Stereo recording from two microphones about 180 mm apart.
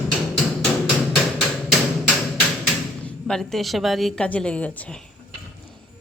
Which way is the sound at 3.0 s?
5° left (ahead or behind).